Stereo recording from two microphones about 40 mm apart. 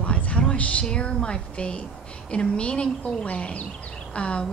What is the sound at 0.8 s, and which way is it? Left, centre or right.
Speech, left.